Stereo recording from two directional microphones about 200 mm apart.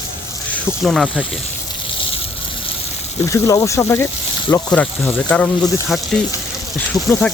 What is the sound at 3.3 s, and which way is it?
Speech, 15° left (ahead or behind).